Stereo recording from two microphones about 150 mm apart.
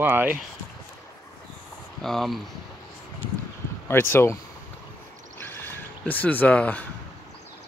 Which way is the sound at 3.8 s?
15° left (ahead or behind).